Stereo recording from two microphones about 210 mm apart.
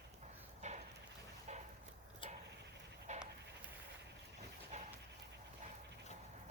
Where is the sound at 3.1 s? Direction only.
35° right (ahead or behind).